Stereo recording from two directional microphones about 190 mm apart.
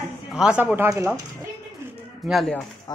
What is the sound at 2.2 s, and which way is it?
Speech, centre (ahead or behind).